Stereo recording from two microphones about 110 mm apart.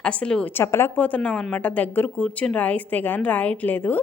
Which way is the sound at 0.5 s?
25° left (ahead or behind).